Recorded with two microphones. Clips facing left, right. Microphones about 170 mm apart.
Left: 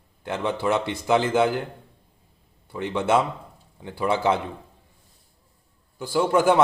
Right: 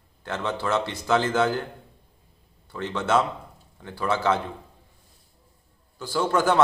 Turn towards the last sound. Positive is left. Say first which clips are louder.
# left 3 dB
turn(degrees=15)  # may be behind; listen again after turning